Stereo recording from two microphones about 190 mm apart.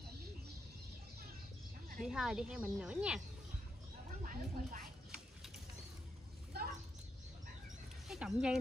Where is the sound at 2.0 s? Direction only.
5° right (ahead or behind).